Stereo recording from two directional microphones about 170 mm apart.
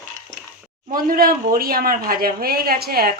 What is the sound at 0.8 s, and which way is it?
Speech, 60° right (ahead or behind).